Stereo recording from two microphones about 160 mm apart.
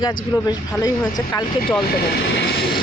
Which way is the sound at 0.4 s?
25° left (ahead or behind).